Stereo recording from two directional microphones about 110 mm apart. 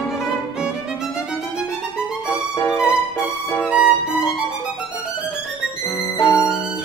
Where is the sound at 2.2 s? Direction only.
25° left (ahead or behind).